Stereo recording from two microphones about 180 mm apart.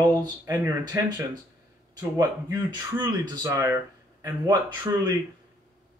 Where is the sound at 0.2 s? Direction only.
20° right (ahead or behind).